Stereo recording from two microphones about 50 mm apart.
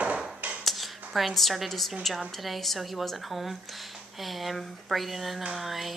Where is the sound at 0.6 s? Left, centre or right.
Centre.